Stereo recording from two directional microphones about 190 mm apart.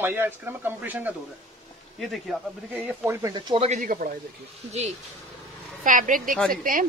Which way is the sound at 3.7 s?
45° right (ahead or behind).